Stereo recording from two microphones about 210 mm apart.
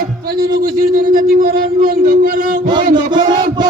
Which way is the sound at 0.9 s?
40° right (ahead or behind).